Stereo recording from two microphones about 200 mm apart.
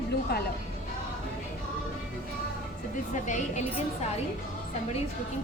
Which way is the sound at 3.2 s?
35° left (ahead or behind).